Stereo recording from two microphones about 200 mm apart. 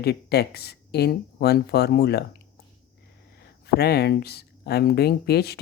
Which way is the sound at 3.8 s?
55° left (ahead or behind).